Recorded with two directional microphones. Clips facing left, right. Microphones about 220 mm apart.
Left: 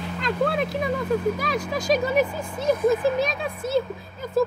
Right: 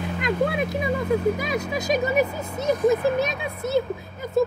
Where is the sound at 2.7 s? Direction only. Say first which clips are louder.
Even; 20° right (ahead or behind).